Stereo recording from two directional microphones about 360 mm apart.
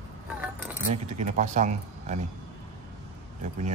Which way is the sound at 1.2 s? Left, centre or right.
Centre.